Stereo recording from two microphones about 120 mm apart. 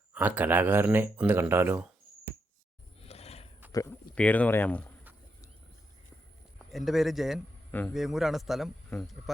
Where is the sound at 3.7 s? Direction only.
25° left (ahead or behind).